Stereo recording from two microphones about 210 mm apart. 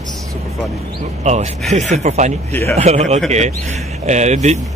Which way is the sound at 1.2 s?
35° right (ahead or behind).